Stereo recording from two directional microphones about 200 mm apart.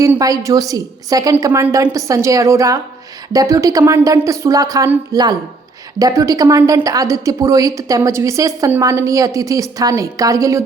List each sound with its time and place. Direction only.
0.0 s a woman's voice: 15° right (ahead or behind)